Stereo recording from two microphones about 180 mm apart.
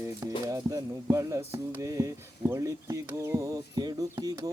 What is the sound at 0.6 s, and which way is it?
Speech, 20° right (ahead or behind).